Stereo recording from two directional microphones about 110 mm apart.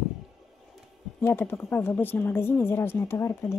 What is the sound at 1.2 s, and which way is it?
Speech, 20° left (ahead or behind).